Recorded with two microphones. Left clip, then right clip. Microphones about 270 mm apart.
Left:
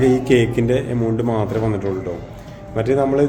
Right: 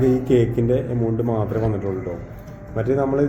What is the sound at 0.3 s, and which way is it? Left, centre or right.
A man's voice, centre.